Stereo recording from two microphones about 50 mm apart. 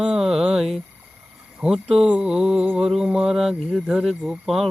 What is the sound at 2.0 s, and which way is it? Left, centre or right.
Mantra, right.